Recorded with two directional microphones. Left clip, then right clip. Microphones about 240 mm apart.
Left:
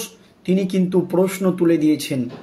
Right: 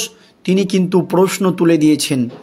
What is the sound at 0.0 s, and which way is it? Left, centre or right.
Speech, right.